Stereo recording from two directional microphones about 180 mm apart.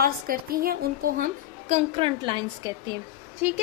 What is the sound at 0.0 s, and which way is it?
A woman's voice, 55° right (ahead or behind).